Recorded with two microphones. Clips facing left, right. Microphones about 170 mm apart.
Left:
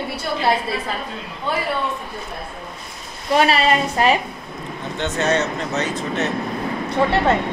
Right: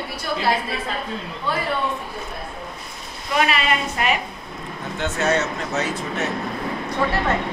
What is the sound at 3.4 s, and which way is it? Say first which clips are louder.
Speech: left 4 dB; 35° left (ahead or behind).